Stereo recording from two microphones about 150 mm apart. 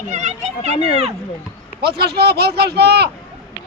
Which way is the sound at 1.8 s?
90° right.